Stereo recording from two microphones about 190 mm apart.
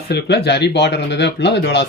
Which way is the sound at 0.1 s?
60° left (ahead or behind).